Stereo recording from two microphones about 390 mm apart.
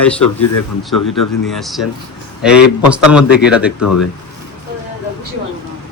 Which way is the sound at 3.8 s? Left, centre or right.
Left.